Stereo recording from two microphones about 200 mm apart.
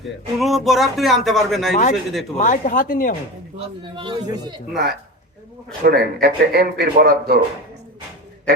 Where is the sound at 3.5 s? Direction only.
25° right (ahead or behind).